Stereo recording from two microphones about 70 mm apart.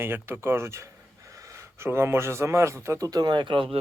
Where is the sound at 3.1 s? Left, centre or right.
Right.